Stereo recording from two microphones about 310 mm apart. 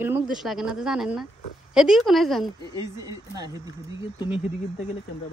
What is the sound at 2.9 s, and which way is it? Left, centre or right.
Speech, centre.